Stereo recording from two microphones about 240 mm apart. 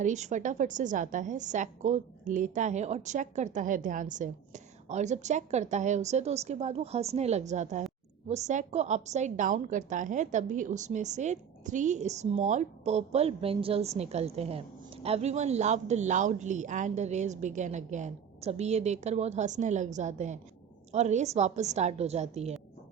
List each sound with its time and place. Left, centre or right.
0.0 s a woman's voice: right